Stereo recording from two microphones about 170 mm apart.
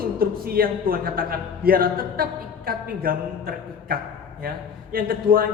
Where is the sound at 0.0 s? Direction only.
60° right (ahead or behind).